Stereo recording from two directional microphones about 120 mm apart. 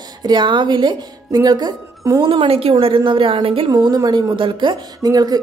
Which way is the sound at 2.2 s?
45° right (ahead or behind).